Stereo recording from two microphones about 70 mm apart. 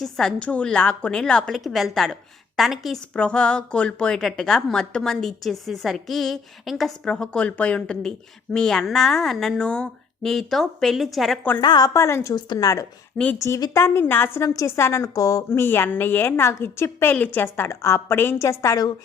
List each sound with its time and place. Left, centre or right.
0.0 s a woman's voice: centre
0.4 s a woman's voice: centre
3.1 s a woman's voice: centre
9.6 s a woman's voice: centre
10.2 s a woman's voice: centre
11.6 s a woman's voice: left
11.9 s a woman's voice: left
12.5 s speech: left
13.2 s speech: centre
13.7 s a woman's voice: left
14.4 s speech: left
14.8 s a woman's voice: left
15.0 s speech: left
15.4 s a woman's voice: left